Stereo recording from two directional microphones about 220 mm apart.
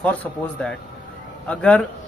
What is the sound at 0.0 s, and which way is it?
Speech, 5° left (ahead or behind).